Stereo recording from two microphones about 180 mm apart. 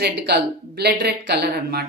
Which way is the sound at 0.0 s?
65° right (ahead or behind).